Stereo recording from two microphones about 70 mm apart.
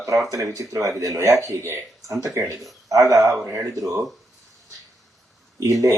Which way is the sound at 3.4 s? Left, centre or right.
Right.